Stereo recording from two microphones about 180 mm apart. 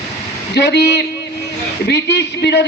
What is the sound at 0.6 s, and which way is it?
A man's voice, 65° left (ahead or behind).